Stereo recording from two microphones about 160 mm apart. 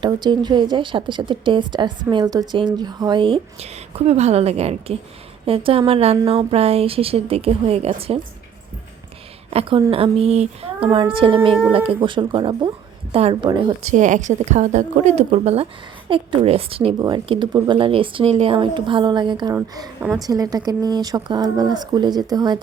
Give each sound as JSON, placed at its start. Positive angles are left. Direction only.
{"t": 0.0, "sound": "a woman's voice", "side_deg": -30}
{"t": 9.5, "sound": "a woman's voice", "side_deg": -35}
{"t": 13.9, "sound": "a woman's voice", "side_deg": -50}